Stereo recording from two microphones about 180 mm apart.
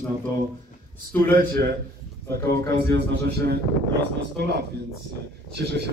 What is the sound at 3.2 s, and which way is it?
Speech, 65° right (ahead or behind).